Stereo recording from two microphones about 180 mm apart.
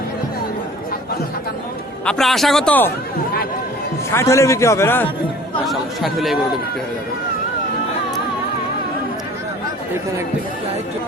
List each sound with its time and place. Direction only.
2.0 s speech: centre (ahead or behind)
4.1 s a man's voice: 15° left (ahead or behind)
5.6 s speech: centre (ahead or behind)